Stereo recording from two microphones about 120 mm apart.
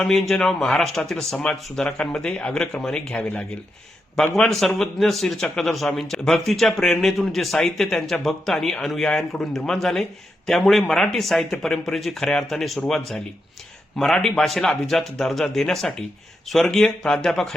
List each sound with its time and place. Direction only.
0.0 s a man's voice: 5° left (ahead or behind)